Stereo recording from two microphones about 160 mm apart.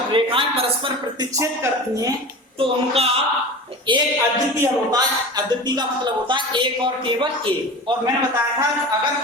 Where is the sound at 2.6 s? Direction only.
35° right (ahead or behind).